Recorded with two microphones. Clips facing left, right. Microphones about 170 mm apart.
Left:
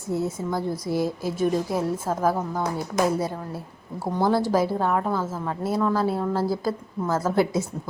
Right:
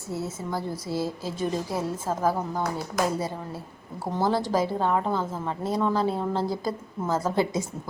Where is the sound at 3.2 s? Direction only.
15° left (ahead or behind).